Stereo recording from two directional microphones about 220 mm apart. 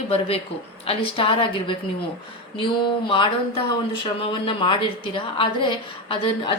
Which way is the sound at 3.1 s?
25° left (ahead or behind).